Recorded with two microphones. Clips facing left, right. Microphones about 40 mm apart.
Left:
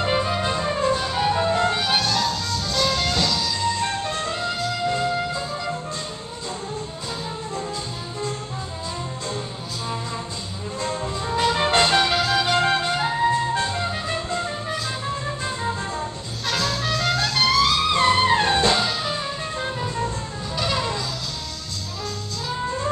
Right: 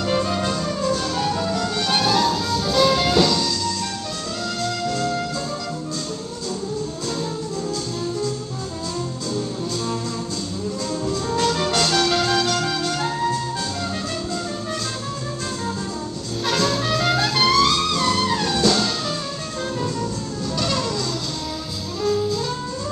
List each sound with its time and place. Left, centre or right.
0.0 s music: centre
2.0 s music: centre
4.8 s music: left
10.8 s music: left
12.2 s music: centre
12.4 s music: left
16.4 s music: centre
17.9 s music: left
18.8 s music: centre
20.5 s music: centre